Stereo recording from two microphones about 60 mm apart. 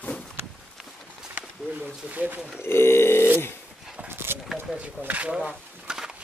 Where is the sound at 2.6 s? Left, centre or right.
Left.